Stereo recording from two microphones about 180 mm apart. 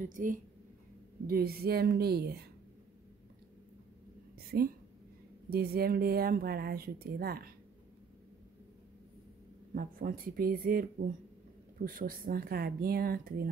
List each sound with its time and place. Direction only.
0.0 s speech: 45° right (ahead or behind)
4.4 s whispering: 60° right (ahead or behind)
5.5 s speech: 60° right (ahead or behind)
9.8 s speech: 55° right (ahead or behind)